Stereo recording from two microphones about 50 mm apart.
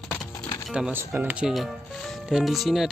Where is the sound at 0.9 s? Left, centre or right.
Right.